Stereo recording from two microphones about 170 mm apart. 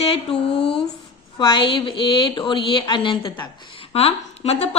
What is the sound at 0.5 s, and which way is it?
Speech, 80° left.